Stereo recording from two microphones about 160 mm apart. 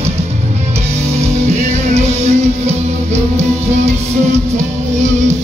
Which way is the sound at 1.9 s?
45° right (ahead or behind).